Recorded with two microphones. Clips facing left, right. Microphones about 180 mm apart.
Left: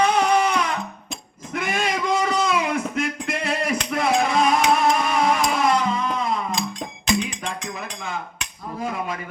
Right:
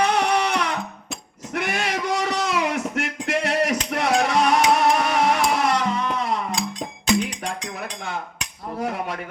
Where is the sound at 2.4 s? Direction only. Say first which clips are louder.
Left 1 dB; 70° right (ahead or behind).